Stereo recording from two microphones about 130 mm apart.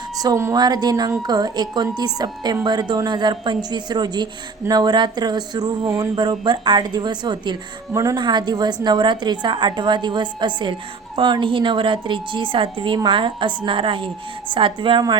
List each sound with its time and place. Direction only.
0.2 s a woman's voice: 25° right (ahead or behind)